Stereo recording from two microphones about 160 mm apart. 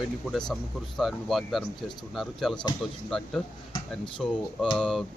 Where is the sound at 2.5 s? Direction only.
25° left (ahead or behind).